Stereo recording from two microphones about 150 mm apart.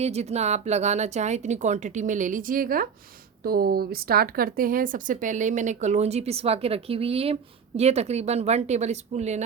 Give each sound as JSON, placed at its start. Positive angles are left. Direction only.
{"t": 0.0, "sound": "speech", "side_deg": -45}
{"t": 3.4, "sound": "a woman's voice", "side_deg": -85}